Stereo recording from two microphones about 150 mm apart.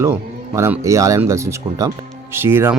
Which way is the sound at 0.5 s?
20° right (ahead or behind).